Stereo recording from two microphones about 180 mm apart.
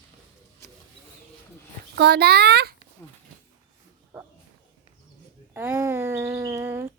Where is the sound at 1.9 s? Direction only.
65° right (ahead or behind).